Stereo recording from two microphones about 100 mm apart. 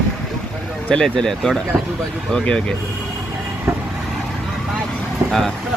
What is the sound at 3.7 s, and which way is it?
Vehicle, 25° right (ahead or behind).